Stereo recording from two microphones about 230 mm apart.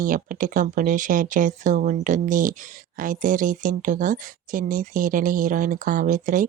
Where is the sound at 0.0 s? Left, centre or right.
Right.